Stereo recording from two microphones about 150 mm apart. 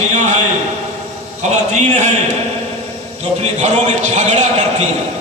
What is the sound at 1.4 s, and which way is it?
Speech, 50° right (ahead or behind).